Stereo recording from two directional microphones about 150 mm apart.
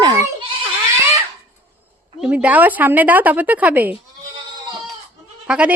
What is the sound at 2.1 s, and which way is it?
Speech, 5° right (ahead or behind).